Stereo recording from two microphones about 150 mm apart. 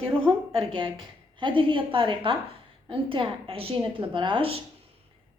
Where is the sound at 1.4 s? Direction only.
35° right (ahead or behind).